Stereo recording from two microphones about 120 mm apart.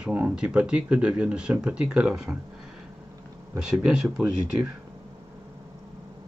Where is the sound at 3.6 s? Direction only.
5° right (ahead or behind).